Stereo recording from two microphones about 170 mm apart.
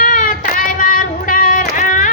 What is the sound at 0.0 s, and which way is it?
Child singing, 50° left (ahead or behind).